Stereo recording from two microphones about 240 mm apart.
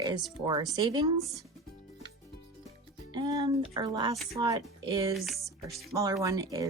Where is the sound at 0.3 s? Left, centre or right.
Centre.